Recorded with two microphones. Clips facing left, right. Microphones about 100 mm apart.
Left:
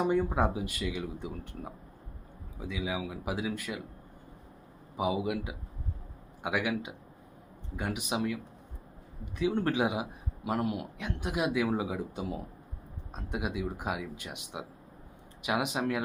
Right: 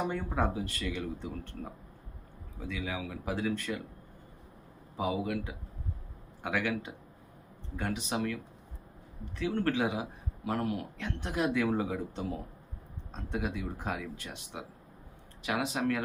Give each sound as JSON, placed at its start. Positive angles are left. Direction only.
{"t": 0.1, "sound": "speech", "side_deg": 15}
{"t": 4.9, "sound": "speech", "side_deg": 15}